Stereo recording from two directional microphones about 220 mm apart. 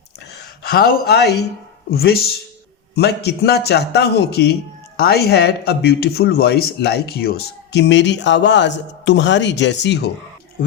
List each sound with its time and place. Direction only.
0.3 s speech: 45° left (ahead or behind)